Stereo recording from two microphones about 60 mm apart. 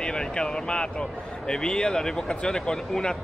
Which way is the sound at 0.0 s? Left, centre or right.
Centre.